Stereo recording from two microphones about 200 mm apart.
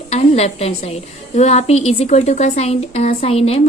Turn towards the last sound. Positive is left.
turn(degrees=30)  # may be behind; listen again after turning